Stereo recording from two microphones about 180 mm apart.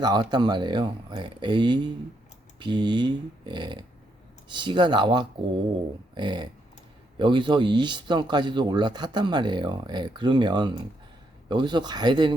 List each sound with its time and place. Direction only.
0.0 s speech: 25° right (ahead or behind)